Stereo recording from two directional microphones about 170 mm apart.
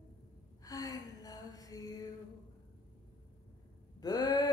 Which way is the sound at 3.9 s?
25° left (ahead or behind).